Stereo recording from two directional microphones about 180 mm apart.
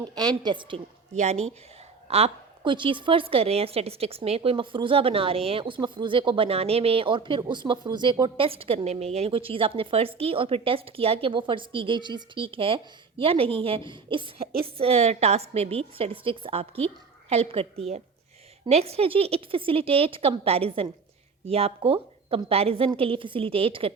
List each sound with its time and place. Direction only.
0.2 s a woman's voice: 25° right (ahead or behind)
1.1 s a woman's voice: 40° right (ahead or behind)